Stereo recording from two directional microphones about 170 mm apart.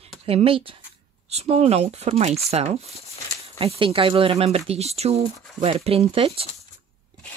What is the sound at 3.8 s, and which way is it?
Speech, 30° right (ahead or behind).